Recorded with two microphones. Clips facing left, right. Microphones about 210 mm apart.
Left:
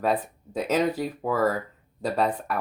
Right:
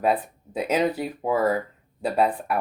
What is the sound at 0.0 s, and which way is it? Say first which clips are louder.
Speech: right 2 dB; 10° right (ahead or behind).